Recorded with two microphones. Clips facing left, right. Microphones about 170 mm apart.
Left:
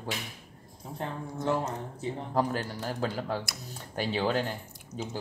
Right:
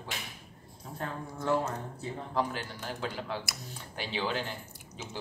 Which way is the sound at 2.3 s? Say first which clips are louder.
Left 4 dB; 40° left (ahead or behind).